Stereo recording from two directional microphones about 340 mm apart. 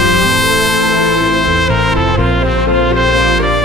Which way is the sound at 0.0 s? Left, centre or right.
Centre.